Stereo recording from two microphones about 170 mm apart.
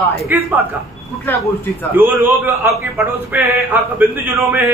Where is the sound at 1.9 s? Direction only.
10° right (ahead or behind).